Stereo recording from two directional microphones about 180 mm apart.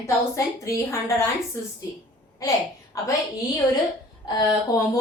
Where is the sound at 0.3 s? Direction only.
15° left (ahead or behind).